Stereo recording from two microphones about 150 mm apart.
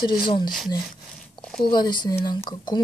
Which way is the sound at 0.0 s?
30° left (ahead or behind).